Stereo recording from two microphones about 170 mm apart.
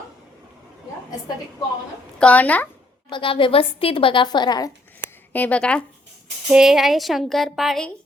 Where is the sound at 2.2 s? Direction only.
10° left (ahead or behind).